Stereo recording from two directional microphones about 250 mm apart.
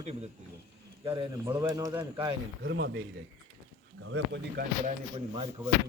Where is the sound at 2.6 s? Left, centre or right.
Right.